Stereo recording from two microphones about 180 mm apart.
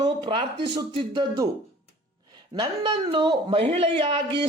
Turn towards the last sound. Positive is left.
turn(degrees=-30)  # may be behind; listen again after turning